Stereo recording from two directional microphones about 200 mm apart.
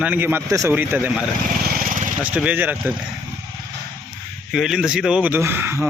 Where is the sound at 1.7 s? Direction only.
45° right (ahead or behind).